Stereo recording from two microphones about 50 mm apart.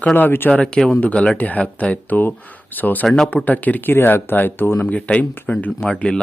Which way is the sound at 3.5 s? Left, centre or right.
Left.